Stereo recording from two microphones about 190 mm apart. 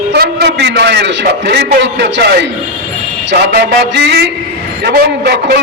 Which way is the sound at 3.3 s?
70° right (ahead or behind).